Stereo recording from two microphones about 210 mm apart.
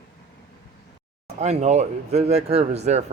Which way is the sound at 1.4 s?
30° right (ahead or behind).